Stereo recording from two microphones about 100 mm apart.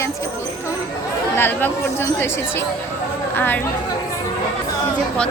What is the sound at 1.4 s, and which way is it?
Speech, 20° left (ahead or behind).